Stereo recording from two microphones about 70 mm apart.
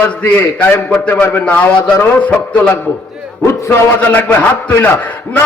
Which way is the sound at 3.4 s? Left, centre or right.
Left.